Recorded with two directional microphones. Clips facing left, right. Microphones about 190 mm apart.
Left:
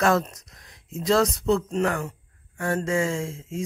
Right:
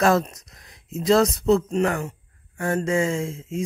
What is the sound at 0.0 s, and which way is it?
Speech, 25° right (ahead or behind).